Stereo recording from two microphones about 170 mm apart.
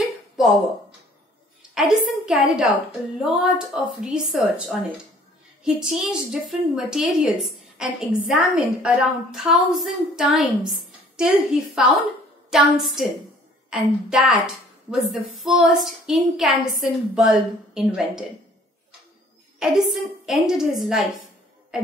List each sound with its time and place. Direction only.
1.8 s a woman's voice: centre (ahead or behind)
19.6 s a woman's voice: centre (ahead or behind)